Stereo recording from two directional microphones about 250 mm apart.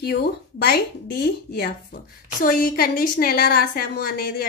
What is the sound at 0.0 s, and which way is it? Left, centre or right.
A woman's voice, left.